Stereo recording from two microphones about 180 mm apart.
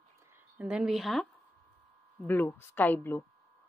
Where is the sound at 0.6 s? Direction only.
5° right (ahead or behind).